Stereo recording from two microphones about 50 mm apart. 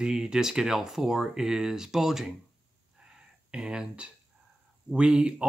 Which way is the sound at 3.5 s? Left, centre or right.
Centre.